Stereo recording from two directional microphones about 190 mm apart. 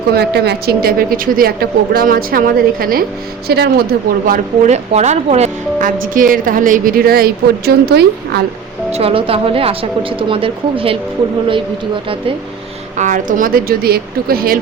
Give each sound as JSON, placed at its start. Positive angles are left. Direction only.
{"t": 0.2, "sound": "speech", "side_deg": -60}
{"t": 4.3, "sound": "speech", "side_deg": -35}
{"t": 8.9, "sound": "a woman's voice", "side_deg": -30}
{"t": 13.0, "sound": "speech", "side_deg": -45}